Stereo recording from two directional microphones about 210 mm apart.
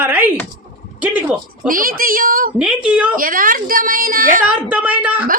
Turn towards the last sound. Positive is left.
turn(degrees=-5)  # may be behind; listen again after turning